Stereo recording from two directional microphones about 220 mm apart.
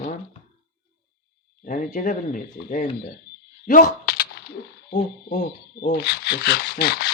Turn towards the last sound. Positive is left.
turn(degrees=45)  # may be behind; listen again after turning